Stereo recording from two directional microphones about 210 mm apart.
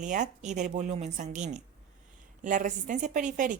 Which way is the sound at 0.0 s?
35° right (ahead or behind).